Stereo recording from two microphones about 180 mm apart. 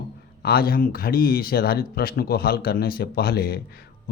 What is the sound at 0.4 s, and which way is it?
A man's voice, 55° left (ahead or behind).